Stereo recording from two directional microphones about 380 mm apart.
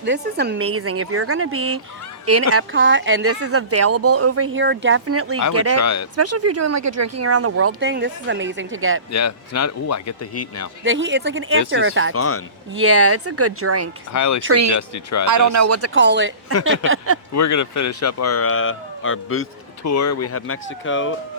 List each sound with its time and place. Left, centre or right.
0.0 s speech: right
5.8 s speech: left
6.1 s speech: right
9.1 s speech: left
10.8 s speech: right
12.1 s speech: left
12.7 s speech: right
14.1 s speech: left
14.4 s speech: right
14.8 s speech: left
15.3 s speech: right
16.0 s speech: right
17.3 s speech: left